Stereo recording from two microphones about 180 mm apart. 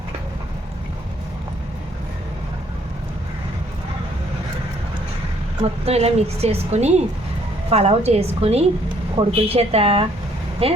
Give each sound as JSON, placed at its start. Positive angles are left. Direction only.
{"t": 5.6, "sound": "a woman's voice", "side_deg": -35}